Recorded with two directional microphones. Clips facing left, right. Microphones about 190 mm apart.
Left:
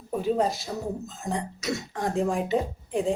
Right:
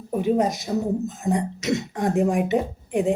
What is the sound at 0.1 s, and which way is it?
Speech, 15° right (ahead or behind).